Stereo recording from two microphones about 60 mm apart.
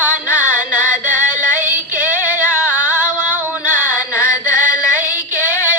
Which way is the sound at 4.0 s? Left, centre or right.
Left.